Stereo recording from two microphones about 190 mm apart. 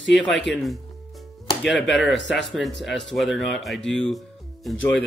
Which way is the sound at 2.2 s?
70° left (ahead or behind).